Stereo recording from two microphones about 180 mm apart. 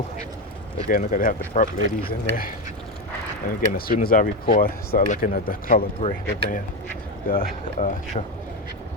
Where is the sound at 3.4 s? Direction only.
55° left (ahead or behind).